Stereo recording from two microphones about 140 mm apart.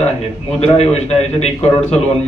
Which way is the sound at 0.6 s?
50° left (ahead or behind).